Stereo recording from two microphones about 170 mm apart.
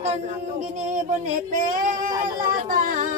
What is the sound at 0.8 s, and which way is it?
Speech, 45° right (ahead or behind).